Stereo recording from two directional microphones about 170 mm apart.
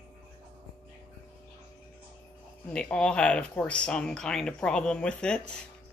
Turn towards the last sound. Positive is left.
turn(degrees=5)  # may be behind; listen again after turning